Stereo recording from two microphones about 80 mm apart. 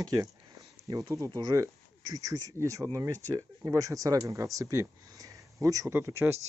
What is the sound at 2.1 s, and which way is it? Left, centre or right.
Speech, right.